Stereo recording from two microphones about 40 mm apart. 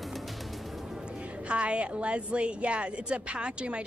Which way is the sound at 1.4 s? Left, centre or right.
Right.